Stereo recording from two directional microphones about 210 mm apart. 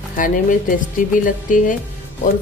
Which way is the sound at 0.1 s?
40° left (ahead or behind).